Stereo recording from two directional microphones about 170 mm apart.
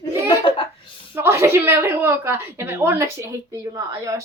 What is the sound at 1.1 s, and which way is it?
Speech, 15° right (ahead or behind).